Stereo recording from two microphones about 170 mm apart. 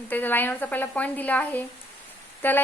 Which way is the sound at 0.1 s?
10° left (ahead or behind).